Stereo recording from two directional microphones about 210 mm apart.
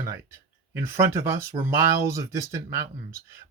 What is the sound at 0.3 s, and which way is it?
Speech, 10° right (ahead or behind).